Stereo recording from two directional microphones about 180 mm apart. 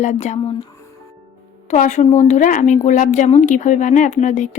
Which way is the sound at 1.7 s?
40° left (ahead or behind).